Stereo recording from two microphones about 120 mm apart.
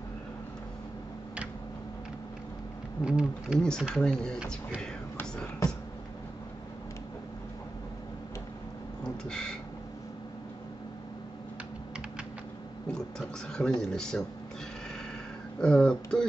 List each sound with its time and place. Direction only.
3.1 s speech: 5° right (ahead or behind)
3.5 s speech: 5° left (ahead or behind)
5.6 s a sound: 30° left (ahead or behind)
9.3 s a sound: 5° left (ahead or behind)
13.5 s speech: 5° left (ahead or behind)
15.6 s speech: 5° left (ahead or behind)